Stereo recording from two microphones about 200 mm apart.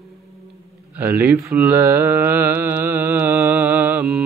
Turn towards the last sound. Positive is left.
turn(degrees=-5)  # may be behind; listen again after turning